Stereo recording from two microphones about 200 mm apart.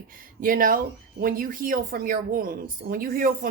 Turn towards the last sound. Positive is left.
turn(degrees=-45)  # may be behind; listen again after turning